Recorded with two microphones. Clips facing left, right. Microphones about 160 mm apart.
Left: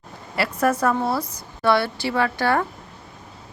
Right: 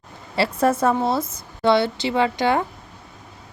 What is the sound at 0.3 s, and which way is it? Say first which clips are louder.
A woman's voice: right 2 dB; 25° right (ahead or behind).